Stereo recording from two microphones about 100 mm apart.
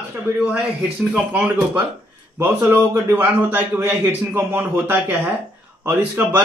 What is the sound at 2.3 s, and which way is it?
A man's voice, 25° right (ahead or behind).